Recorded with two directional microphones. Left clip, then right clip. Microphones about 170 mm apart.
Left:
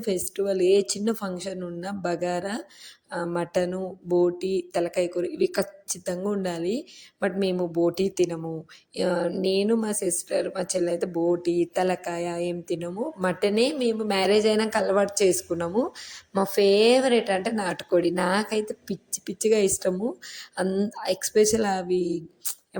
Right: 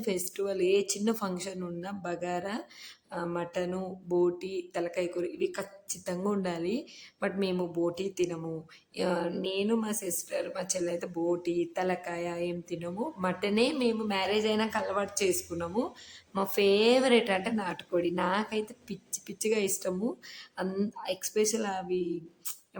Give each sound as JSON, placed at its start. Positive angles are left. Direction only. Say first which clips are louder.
{"t": 0.0, "sound": "a woman's voice", "louder": "left 5 dB", "side_deg": 15}
{"t": 6.1, "sound": "a woman's voice", "louder": "left 4 dB", "side_deg": 15}